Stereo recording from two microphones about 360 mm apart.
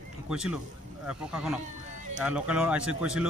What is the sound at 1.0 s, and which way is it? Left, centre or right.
A man's voice, centre.